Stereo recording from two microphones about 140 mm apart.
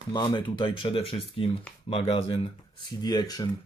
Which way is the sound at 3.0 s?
30° left (ahead or behind).